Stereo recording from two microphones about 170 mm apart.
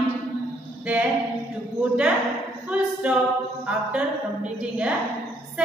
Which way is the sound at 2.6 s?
5° right (ahead or behind).